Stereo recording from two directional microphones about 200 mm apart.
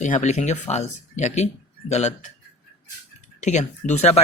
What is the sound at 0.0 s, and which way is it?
Speech, 35° left (ahead or behind).